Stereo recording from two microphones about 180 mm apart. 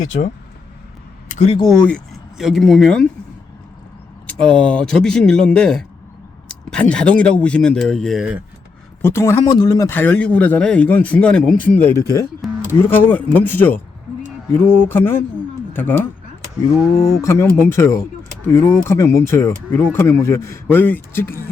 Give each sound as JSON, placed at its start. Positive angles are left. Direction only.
{"t": 1.3, "sound": "speech", "side_deg": 40}
{"t": 2.4, "sound": "speech", "side_deg": 0}
{"t": 4.3, "sound": "speech", "side_deg": 5}
{"t": 9.0, "sound": "speech", "side_deg": 15}
{"t": 12.4, "sound": "a sound", "side_deg": 0}
{"t": 12.8, "sound": "speech", "side_deg": 10}
{"t": 17.1, "sound": "speech", "side_deg": 15}